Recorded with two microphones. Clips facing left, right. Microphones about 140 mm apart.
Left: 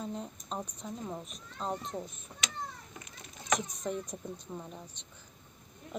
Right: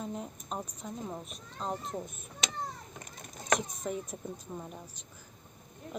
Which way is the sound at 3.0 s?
45° right (ahead or behind).